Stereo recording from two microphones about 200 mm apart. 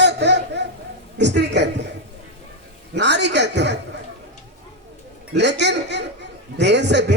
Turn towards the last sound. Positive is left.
turn(degrees=-60)  # may be behind; listen again after turning